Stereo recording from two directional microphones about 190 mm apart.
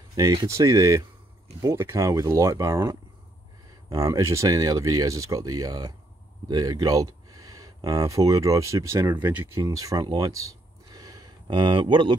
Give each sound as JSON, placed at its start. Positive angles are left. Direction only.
{"t": 0.1, "sound": "speech", "side_deg": -20}